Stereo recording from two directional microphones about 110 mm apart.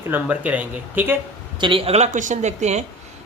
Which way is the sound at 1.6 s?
50° right (ahead or behind).